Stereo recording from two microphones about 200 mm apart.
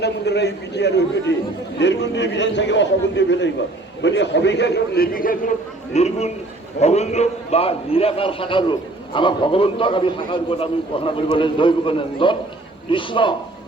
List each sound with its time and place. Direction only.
0.0 s a man's voice: 55° left (ahead or behind)
5.9 s a man's voice: 35° left (ahead or behind)